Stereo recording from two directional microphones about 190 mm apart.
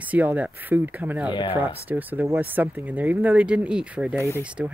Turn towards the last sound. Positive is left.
turn(degrees=-5)  # may be behind; listen again after turning